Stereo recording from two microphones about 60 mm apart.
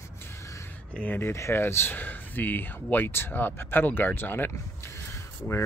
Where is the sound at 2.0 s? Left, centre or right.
Left.